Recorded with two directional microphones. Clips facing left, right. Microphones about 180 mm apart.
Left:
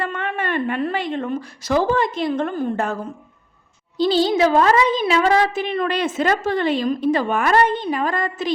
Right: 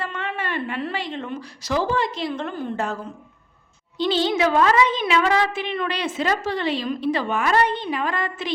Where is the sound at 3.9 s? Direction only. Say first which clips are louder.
Left 4 dB; 40° left (ahead or behind).